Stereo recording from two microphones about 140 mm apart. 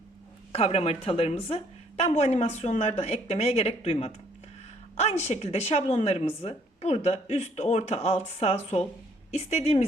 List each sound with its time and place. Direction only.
0.5 s speech: 50° left (ahead or behind)